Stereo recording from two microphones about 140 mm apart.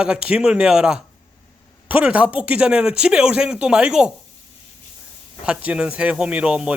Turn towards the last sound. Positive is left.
turn(degrees=-5)  # may be behind; listen again after turning